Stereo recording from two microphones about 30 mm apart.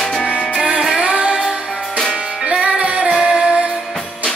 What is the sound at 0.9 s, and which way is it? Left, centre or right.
Music, right.